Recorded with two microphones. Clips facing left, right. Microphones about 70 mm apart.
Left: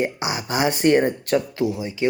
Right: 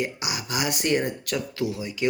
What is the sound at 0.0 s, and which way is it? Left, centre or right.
Speech, left.